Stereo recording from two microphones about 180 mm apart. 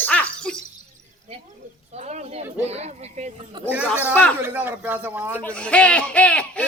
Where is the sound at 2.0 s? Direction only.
40° right (ahead or behind).